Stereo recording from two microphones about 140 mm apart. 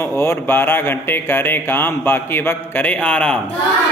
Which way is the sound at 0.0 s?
15° left (ahead or behind).